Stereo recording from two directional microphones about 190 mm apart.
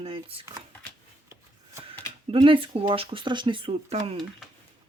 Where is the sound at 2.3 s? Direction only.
25° right (ahead or behind).